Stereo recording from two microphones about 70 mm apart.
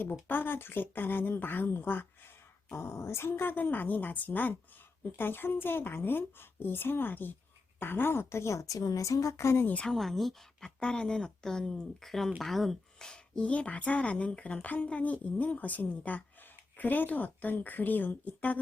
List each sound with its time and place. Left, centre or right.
0.0 s a woman's voice: left
2.7 s a woman's voice: left
9.8 s a woman's voice: centre
13.4 s a woman's voice: left